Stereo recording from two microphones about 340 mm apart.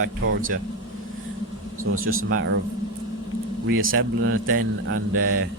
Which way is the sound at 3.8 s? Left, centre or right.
Right.